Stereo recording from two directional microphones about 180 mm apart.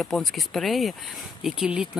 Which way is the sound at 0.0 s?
Centre (ahead or behind).